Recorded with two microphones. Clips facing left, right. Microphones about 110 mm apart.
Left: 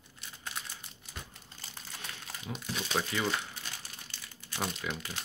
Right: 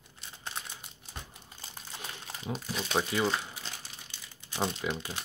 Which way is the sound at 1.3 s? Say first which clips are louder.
Right 2 dB; 15° right (ahead or behind).